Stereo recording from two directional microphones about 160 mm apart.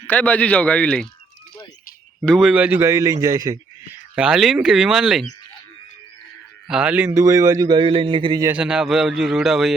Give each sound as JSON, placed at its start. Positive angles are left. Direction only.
{"t": 0.1, "sound": "a man's voice", "side_deg": 10}
{"t": 2.2, "sound": "a man's voice", "side_deg": 0}
{"t": 4.1, "sound": "a man's voice", "side_deg": -5}
{"t": 6.7, "sound": "a man's voice", "side_deg": -5}
{"t": 8.4, "sound": "a man's voice", "side_deg": -5}